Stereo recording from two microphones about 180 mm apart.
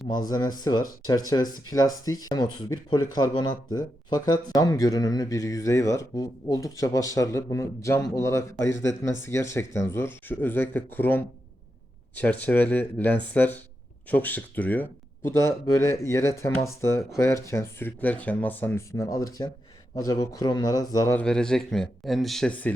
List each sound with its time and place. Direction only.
0.1 s speech: 20° left (ahead or behind); by 22.7 s 5° left (ahead or behind)